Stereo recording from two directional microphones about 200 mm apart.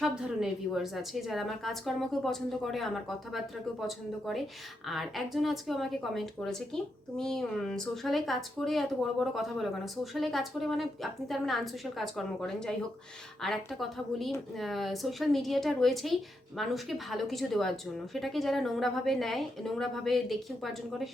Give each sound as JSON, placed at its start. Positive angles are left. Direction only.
{"t": 0.0, "sound": "speech", "side_deg": -5}